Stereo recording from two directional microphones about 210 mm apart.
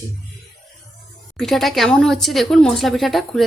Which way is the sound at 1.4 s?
Centre (ahead or behind).